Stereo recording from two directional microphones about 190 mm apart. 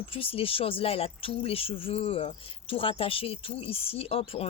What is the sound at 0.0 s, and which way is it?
Speech, 30° left (ahead or behind).